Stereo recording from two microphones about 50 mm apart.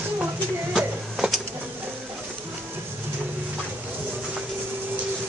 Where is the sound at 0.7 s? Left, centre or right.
Centre.